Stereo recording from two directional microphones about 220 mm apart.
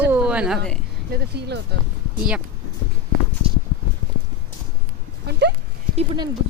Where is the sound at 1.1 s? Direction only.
50° right (ahead or behind).